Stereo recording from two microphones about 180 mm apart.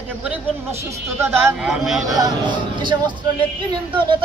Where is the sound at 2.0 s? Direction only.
20° right (ahead or behind).